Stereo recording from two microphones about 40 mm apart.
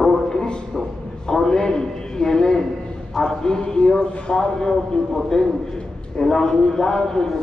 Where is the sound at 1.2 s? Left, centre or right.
Centre.